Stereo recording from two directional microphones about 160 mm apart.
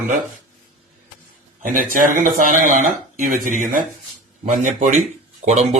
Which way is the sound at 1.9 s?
55° right (ahead or behind).